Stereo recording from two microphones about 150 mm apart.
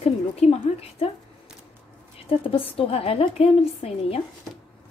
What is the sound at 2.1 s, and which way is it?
A woman's voice, 40° left (ahead or behind).